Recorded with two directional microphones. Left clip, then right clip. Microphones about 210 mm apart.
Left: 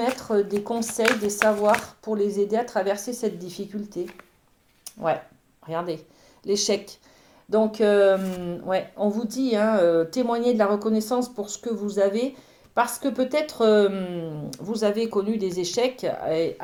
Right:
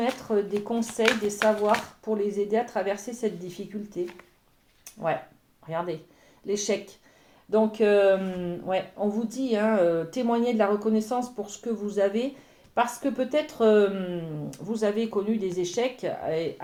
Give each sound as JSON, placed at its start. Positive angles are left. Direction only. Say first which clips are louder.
{"t": 0.0, "sound": "speech", "louder": "left 3 dB", "side_deg": 35}
{"t": 5.6, "sound": "speech", "louder": "left 2 dB", "side_deg": 40}